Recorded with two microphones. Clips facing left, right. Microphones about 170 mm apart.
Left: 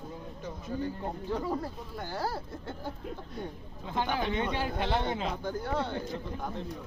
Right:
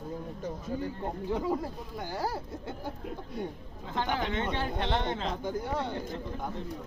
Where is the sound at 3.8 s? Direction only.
15° left (ahead or behind).